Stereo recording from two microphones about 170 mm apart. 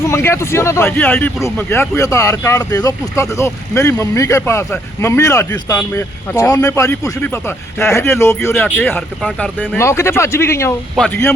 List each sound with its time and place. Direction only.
0.0 s speech: 15° left (ahead or behind)
10.9 s speech: 5° left (ahead or behind)